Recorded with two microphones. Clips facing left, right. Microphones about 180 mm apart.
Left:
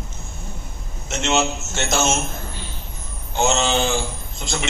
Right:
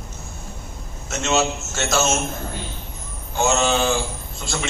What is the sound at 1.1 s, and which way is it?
Speech, 20° left (ahead or behind).